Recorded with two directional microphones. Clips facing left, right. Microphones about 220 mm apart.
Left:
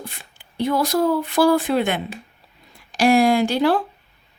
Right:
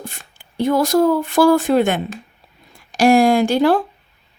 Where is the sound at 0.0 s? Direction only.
45° right (ahead or behind).